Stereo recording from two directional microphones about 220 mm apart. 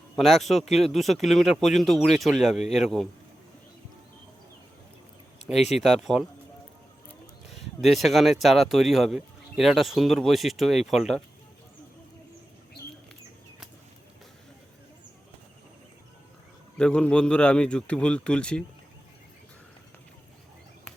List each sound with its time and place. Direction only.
0.2 s speech: centre (ahead or behind)
5.5 s speech: 30° left (ahead or behind)
5.8 s speech: centre (ahead or behind)
7.5 s speech: centre (ahead or behind)
16.7 s speech: 5° left (ahead or behind)